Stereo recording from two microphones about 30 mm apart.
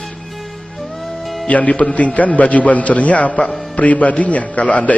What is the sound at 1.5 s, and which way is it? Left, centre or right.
A man's voice, left.